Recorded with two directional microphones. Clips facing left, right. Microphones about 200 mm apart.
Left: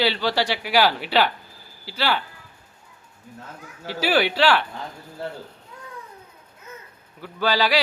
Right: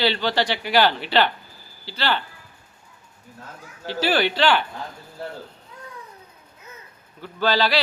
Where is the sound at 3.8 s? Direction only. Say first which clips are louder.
Even; 10° left (ahead or behind).